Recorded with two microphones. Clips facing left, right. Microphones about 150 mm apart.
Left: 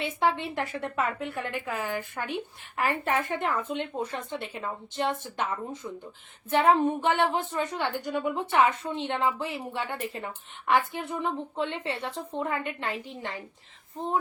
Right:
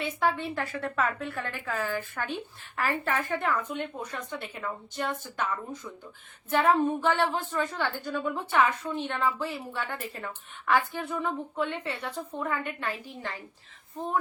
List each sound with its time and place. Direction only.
0.0 s a woman's voice: 25° left (ahead or behind)